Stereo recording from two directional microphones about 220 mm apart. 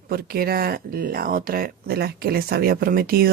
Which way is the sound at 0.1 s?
45° right (ahead or behind).